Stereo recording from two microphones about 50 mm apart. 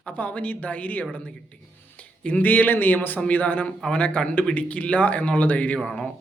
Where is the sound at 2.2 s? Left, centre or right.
Left.